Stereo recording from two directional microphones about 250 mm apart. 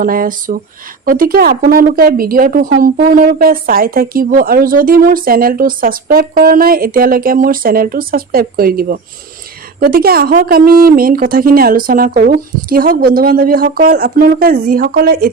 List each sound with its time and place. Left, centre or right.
0.0 s speech: right